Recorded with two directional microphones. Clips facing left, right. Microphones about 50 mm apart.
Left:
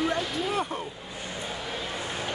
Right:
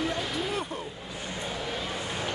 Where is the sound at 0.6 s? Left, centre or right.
Left.